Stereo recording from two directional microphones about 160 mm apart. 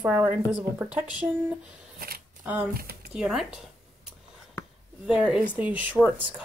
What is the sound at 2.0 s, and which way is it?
Camera, 70° right (ahead or behind).